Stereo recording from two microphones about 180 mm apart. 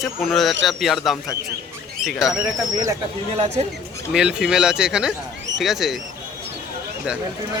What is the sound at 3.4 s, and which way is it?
Speech, 40° right (ahead or behind).